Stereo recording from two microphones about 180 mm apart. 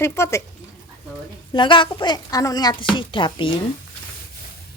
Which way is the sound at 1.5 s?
25° left (ahead or behind).